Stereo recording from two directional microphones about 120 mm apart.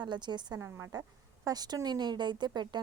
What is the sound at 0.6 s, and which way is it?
Speech, 25° right (ahead or behind).